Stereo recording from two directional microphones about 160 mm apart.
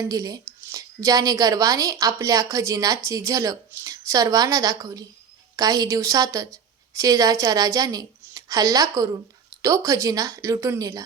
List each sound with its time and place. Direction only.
0.0 s speech: 20° right (ahead or behind)